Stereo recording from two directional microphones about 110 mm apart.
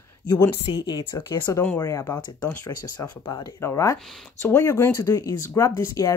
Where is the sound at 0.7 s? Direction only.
50° left (ahead or behind).